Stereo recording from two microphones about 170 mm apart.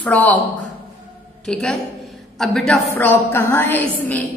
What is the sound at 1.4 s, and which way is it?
A woman's voice, 5° left (ahead or behind).